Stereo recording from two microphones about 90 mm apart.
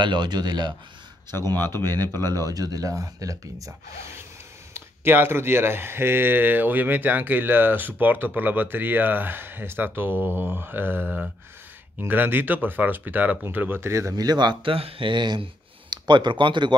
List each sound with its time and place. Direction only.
0.0 s speech: 55° right (ahead or behind)
1.8 s speech: 50° right (ahead or behind)
4.7 s speech: 25° right (ahead or behind)
14.2 s speech: 50° right (ahead or behind)